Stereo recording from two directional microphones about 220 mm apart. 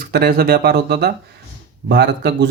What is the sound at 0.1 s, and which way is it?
Speech, 45° right (ahead or behind).